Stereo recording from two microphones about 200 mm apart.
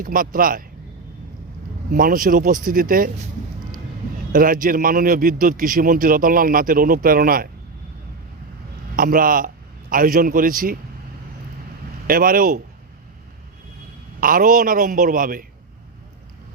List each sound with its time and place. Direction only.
0.0 s a man's voice: 45° right (ahead or behind)
1.9 s a man's voice: 45° right (ahead or behind)
4.3 s a man's voice: 45° right (ahead or behind)
9.0 s a man's voice: 45° right (ahead or behind)
12.0 s a man's voice: 45° right (ahead or behind)
14.2 s a man's voice: 45° right (ahead or behind)